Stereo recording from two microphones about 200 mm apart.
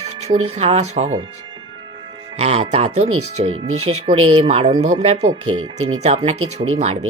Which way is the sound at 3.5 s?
90° right.